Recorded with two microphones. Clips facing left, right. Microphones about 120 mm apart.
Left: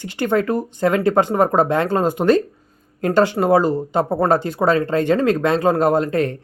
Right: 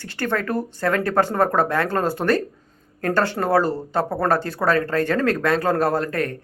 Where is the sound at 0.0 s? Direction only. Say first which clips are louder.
Left 5 dB; 15° left (ahead or behind).